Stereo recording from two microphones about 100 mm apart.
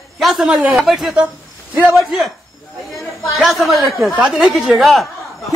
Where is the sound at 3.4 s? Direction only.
Centre (ahead or behind).